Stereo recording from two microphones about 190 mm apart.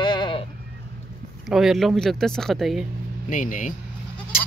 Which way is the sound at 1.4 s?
Centre (ahead or behind).